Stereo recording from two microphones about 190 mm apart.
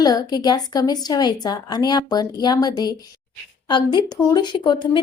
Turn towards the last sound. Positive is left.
turn(degrees=25)  # may be behind; listen again after turning